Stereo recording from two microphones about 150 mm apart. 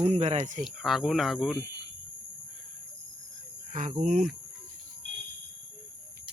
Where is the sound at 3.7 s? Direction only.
55° right (ahead or behind).